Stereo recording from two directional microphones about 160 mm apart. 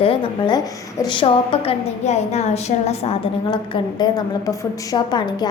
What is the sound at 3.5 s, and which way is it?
A woman's voice, 25° left (ahead or behind).